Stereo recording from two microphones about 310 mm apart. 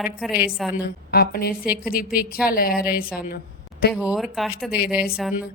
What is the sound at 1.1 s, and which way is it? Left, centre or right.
Speech, left.